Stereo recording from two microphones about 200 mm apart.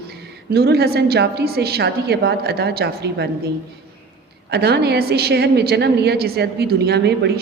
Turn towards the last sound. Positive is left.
turn(degrees=-55)  # may be behind; listen again after turning